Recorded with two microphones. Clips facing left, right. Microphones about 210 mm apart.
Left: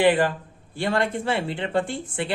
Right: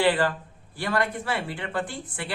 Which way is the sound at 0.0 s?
20° left (ahead or behind).